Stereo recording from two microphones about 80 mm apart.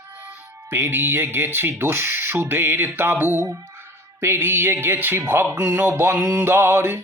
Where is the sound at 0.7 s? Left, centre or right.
Right.